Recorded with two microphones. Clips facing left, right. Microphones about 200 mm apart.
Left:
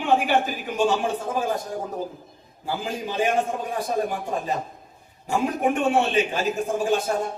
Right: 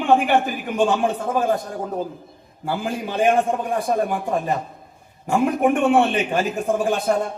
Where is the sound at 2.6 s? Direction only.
55° right (ahead or behind).